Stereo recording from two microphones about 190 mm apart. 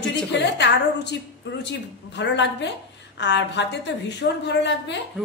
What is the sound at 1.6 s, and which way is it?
A woman's voice, 65° left (ahead or behind).